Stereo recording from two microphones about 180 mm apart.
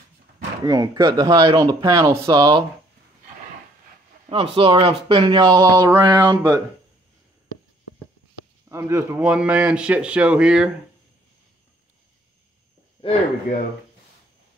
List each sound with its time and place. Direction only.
0.7 s speech: 25° right (ahead or behind)
4.3 s speech: 30° right (ahead or behind)
8.6 s speech: 15° right (ahead or behind)